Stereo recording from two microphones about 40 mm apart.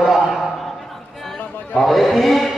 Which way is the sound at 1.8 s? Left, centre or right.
Centre.